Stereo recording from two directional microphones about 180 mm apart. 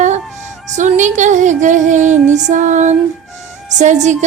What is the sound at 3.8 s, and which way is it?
Speech, 40° right (ahead or behind).